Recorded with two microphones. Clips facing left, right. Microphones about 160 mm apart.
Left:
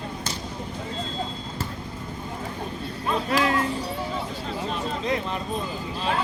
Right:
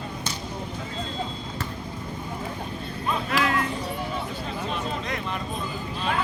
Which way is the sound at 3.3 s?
35° left (ahead or behind).